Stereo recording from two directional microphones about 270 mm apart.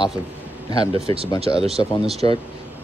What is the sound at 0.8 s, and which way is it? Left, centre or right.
Speech, right.